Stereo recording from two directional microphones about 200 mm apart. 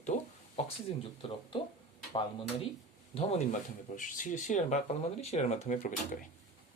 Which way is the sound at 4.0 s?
40° left (ahead or behind).